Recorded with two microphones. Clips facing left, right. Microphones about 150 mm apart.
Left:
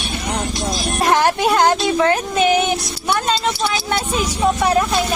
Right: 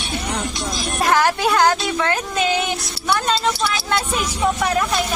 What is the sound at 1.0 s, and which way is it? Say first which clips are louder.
Speech: left 2 dB; 25° left (ahead or behind).